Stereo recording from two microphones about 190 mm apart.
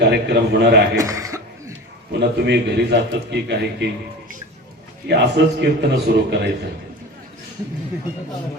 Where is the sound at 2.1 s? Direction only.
60° right (ahead or behind).